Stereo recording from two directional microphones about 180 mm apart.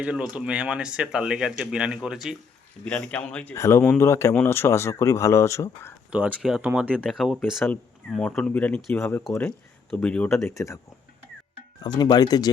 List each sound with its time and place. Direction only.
0.0 s speech: 5° right (ahead or behind); by 5.9 s 15° left (ahead or behind)
6.1 s speech: 5° right (ahead or behind); by 10.8 s 15° left (ahead or behind)
11.8 s speech: 25° left (ahead or behind)